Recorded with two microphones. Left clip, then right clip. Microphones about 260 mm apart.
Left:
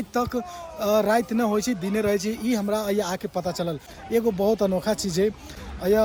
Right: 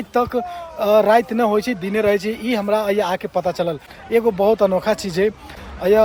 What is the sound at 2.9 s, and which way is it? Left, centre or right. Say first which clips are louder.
Speech: right 7 dB; right.